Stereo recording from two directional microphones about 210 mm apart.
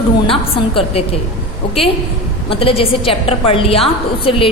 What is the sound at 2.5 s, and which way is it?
A woman's voice, 25° left (ahead or behind).